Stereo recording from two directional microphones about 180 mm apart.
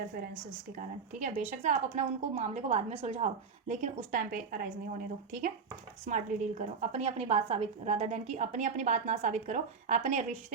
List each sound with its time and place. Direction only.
0.8 s a woman's voice: 40° right (ahead or behind)